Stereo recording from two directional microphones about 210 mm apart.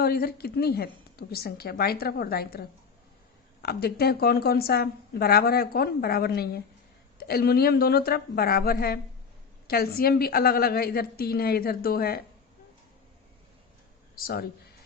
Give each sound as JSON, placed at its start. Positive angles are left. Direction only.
{"t": 0.0, "sound": "speech", "side_deg": 45}
{"t": 14.2, "sound": "speech", "side_deg": 45}